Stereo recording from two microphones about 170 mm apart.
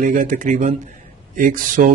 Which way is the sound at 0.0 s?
50° right (ahead or behind).